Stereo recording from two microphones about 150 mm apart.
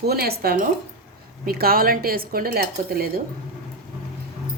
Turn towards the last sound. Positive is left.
turn(degrees=-90)